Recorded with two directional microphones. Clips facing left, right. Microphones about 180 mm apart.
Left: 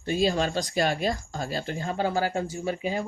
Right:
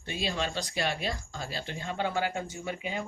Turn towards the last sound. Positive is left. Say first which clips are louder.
# left 6 dB
turn(degrees=35)  # may be behind; listen again after turning